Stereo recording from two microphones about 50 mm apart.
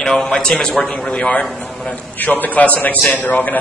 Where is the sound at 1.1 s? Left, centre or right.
Left.